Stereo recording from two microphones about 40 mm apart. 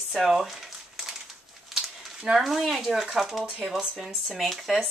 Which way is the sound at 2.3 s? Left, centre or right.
Centre.